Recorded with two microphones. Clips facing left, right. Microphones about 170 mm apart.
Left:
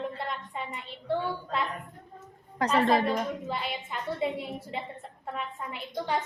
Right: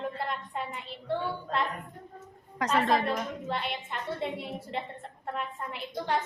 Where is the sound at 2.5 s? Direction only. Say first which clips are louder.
Left 2 dB; 30° left (ahead or behind).